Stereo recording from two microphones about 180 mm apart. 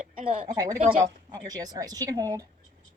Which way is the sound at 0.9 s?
20° right (ahead or behind).